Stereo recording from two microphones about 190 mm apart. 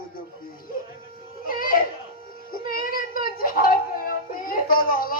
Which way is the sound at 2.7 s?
50° left (ahead or behind).